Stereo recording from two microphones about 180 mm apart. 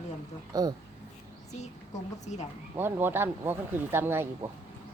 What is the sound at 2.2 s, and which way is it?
Speech, 40° left (ahead or behind).